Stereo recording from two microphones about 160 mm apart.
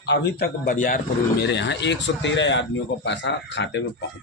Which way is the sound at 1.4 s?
90° left.